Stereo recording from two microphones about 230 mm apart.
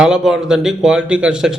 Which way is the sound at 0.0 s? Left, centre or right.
Centre.